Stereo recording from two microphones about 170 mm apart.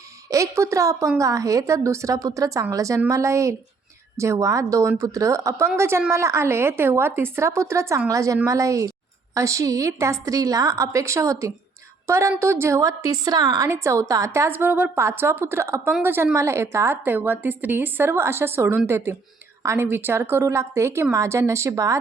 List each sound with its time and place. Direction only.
0.3 s a woman's voice: 15° right (ahead or behind)